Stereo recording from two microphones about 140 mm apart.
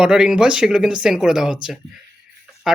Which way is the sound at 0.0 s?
5° right (ahead or behind).